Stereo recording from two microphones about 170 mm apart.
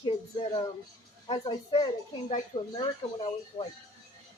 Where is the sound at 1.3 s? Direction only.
30° left (ahead or behind).